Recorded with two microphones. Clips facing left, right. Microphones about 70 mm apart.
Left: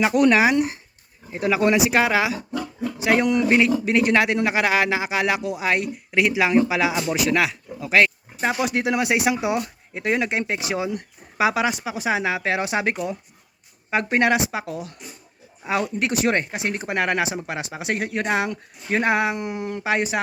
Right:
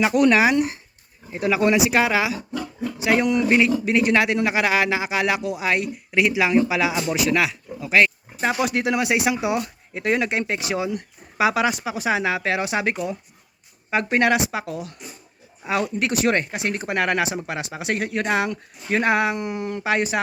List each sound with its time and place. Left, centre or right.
0.0 s speech: left
0.3 s speech: left
1.3 s speech: left
7.8 s speech: left
8.6 s speech: left
9.6 s speech: centre; by 11.5 s left
11.6 s speech: centre
12.5 s speech: left
14.1 s speech: left